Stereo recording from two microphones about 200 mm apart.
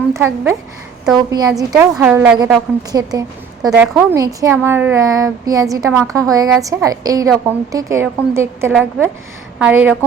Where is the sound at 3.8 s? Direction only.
5° right (ahead or behind).